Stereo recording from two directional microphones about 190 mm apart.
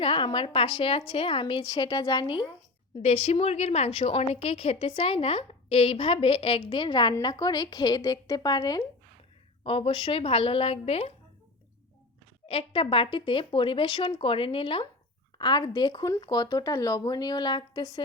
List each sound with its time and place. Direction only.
0.0 s a woman's voice: 25° left (ahead or behind)
12.5 s a woman's voice: 30° left (ahead or behind)